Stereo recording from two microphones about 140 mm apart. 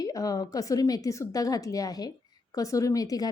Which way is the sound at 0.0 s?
25° left (ahead or behind).